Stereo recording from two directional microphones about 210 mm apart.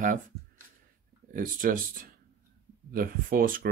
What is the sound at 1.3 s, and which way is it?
Speech, 40° right (ahead or behind).